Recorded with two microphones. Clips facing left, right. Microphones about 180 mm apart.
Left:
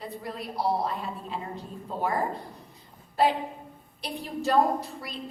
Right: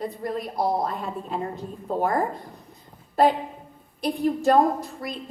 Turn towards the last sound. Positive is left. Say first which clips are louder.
# right 3 dB
turn(degrees=-45)  # may be behind; listen again after turning